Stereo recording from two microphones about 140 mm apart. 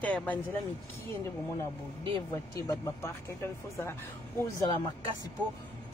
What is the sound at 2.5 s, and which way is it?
Speech, 20° left (ahead or behind).